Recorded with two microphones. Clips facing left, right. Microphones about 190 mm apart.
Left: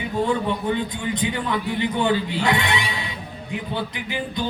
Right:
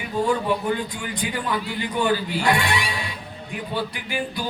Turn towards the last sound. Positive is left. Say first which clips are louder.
# even
turn(degrees=20)  # may be behind; listen again after turning